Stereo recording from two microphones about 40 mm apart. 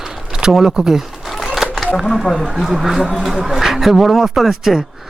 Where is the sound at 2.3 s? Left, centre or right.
Centre.